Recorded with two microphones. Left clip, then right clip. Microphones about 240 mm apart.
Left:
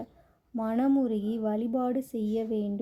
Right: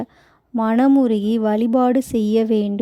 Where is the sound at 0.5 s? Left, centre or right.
Right.